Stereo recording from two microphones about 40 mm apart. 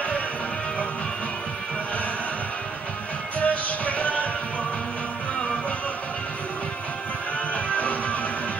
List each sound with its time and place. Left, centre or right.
3.3 s music: left
7.3 s music: left